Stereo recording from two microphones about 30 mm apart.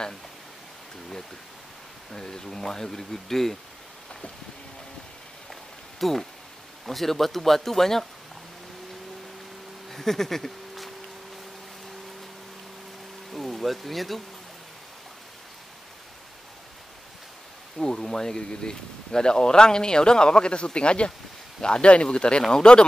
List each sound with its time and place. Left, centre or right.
2.1 s speech: left
5.5 s rain on surface: centre
6.9 s speech: centre
9.8 s speech: centre
13.3 s speech: centre
17.7 s speech: centre; by 21.1 s left
21.5 s speech: left
21.8 s speech: left